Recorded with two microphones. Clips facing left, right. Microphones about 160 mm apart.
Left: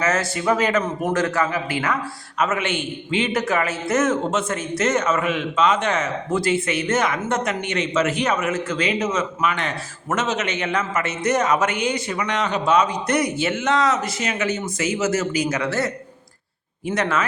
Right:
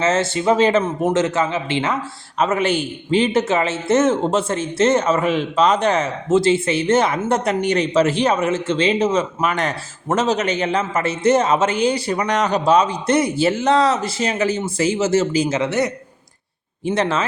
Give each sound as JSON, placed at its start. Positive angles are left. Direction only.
{"t": 0.0, "sound": "a man's voice", "side_deg": -25}